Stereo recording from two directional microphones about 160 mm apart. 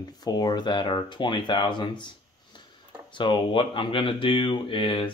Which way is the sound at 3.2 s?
30° left (ahead or behind).